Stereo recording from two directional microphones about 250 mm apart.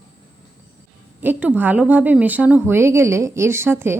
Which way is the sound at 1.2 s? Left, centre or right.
Centre.